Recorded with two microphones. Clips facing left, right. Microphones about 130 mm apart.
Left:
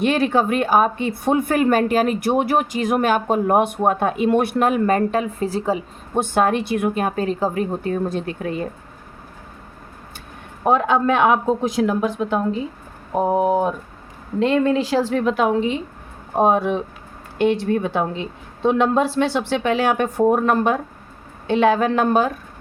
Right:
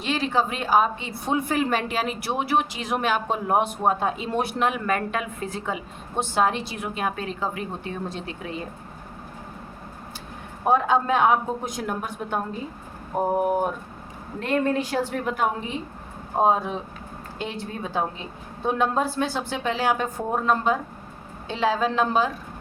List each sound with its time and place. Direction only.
0.0 s a woman's voice: 55° left (ahead or behind); by 5.8 s 35° left (ahead or behind)
6.1 s a woman's voice: 55° left (ahead or behind)
10.7 s speech: 75° left (ahead or behind)
16.4 s a woman's voice: 70° left (ahead or behind)